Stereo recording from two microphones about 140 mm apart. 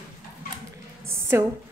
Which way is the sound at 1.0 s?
20° right (ahead or behind).